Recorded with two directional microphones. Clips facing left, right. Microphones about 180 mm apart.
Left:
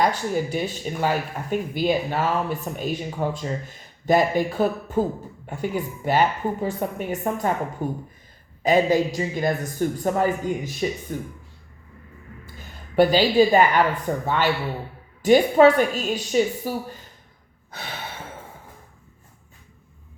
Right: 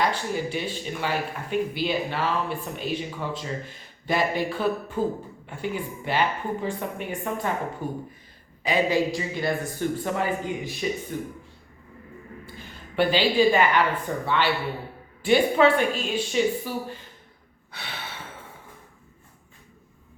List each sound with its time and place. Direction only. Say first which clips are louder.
0.0 s speech: left 3 dB; 45° left (ahead or behind)
12.5 s a woman's voice: left 6 dB; 40° left (ahead or behind)
17.7 s gasp: left 3 dB; 45° left (ahead or behind)